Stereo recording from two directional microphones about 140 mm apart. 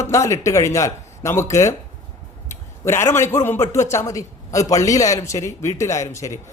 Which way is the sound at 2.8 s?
20° left (ahead or behind).